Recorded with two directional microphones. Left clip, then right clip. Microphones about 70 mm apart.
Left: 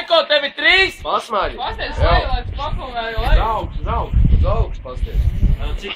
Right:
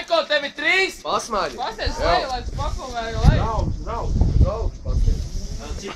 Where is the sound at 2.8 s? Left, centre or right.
Left.